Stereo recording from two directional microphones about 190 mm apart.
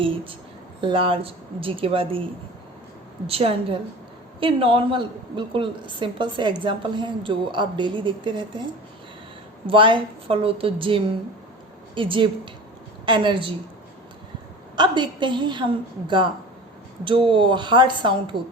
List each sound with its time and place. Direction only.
0.0 s a woman's voice: 25° right (ahead or behind)
3.2 s a woman's voice: 30° right (ahead or behind)
9.6 s a woman's voice: 25° right (ahead or behind)
14.8 s a woman's voice: 25° right (ahead or behind)